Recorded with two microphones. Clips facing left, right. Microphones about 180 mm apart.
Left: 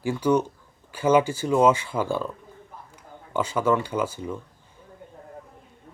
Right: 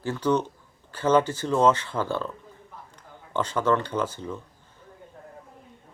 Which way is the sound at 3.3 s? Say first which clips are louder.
Left 1 dB; 10° left (ahead or behind).